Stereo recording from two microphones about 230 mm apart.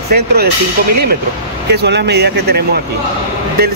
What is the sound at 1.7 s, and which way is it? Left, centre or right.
Speech, right.